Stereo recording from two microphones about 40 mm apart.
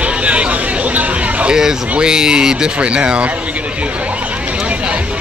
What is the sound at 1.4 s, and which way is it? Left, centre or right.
Speech, centre.